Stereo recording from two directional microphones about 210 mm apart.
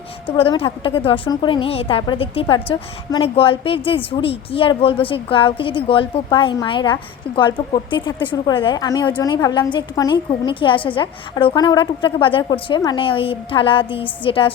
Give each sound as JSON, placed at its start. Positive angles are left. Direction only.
{"t": 0.3, "sound": "a woman's voice", "side_deg": 25}